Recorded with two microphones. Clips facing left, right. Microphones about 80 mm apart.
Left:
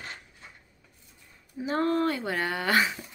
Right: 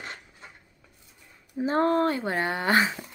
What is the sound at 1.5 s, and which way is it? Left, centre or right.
Speech, right.